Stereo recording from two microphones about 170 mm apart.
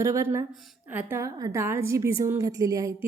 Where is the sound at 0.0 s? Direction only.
15° right (ahead or behind).